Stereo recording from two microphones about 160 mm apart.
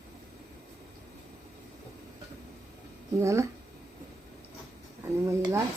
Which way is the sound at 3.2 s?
20° right (ahead or behind).